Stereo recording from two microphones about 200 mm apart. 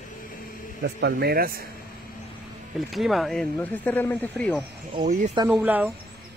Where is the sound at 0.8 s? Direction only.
55° right (ahead or behind).